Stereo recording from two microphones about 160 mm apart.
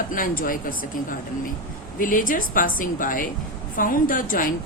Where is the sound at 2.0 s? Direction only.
60° left (ahead or behind).